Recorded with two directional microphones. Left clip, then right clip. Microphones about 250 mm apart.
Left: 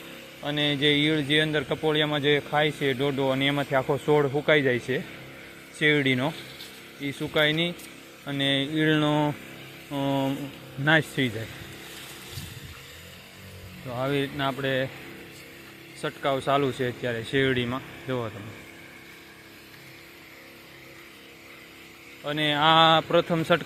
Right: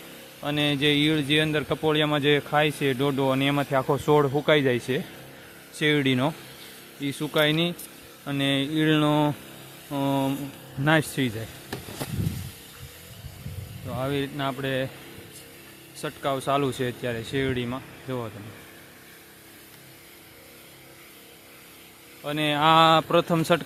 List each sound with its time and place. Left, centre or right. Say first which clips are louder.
0.4 s a man's voice: even; centre
13.9 s speech: left 1 dB; centre
16.0 s speech: left 1 dB; centre
22.2 s speech: even; centre